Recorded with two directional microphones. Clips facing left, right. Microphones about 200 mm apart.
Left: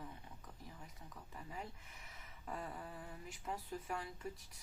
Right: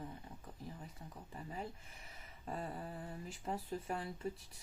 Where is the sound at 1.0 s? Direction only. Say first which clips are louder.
Right 3 dB; 30° right (ahead or behind).